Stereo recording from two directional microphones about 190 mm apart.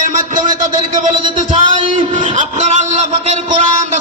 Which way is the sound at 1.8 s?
40° right (ahead or behind).